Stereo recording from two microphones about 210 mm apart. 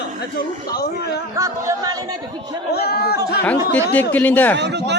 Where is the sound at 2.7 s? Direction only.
50° left (ahead or behind).